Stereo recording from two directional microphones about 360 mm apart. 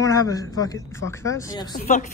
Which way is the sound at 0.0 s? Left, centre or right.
Centre.